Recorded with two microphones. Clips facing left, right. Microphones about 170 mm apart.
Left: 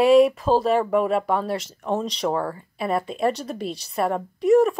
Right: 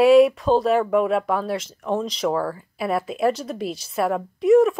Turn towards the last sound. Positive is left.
turn(degrees=0)  # may be behind; listen again after turning